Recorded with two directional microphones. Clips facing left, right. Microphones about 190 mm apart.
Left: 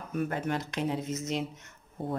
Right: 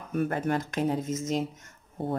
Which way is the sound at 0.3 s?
45° right (ahead or behind).